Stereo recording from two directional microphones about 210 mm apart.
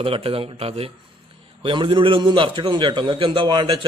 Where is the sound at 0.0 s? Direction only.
25° right (ahead or behind).